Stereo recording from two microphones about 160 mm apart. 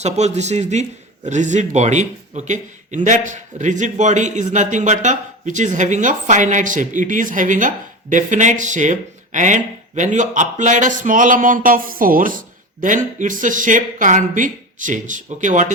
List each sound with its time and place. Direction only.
0.0 s speech: 45° right (ahead or behind)